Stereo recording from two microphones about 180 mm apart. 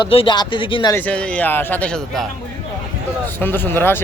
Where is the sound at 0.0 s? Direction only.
30° left (ahead or behind).